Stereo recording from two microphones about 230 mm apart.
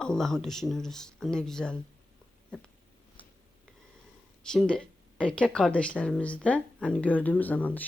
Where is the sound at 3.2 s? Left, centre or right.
Left.